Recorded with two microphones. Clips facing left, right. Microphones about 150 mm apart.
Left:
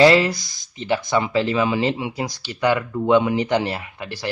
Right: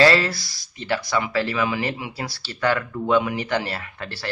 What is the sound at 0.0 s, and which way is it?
Speech, 15° left (ahead or behind).